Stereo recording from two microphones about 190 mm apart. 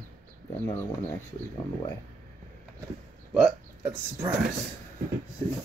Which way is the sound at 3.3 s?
5° right (ahead or behind).